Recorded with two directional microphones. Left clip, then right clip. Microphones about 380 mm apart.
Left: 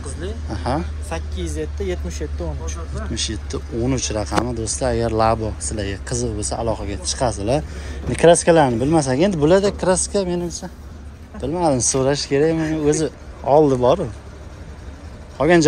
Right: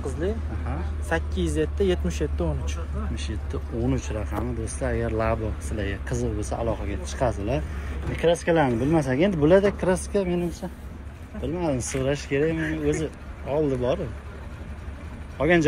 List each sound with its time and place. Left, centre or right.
1.0 s speech: right
3.2 s speech: centre
11.4 s speech: centre
12.5 s speech: left
12.8 s speech: centre
15.3 s speech: centre